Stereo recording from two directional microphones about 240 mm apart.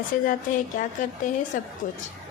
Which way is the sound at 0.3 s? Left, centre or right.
Left.